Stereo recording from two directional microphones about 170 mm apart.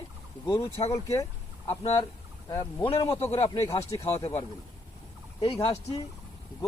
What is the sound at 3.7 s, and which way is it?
Speech, 40° left (ahead or behind).